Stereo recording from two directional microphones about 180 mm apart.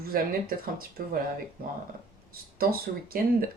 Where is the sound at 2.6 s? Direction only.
55° right (ahead or behind).